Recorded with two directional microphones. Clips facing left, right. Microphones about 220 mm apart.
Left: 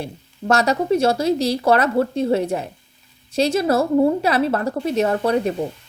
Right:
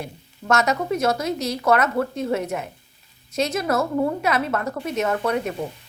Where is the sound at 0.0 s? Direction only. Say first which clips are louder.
Left 6 dB; 30° left (ahead or behind).